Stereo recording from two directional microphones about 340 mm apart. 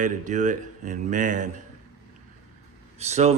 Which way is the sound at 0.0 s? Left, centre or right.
Right.